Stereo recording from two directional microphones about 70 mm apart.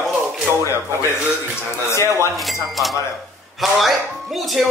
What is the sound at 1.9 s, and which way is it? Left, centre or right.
Speech, left.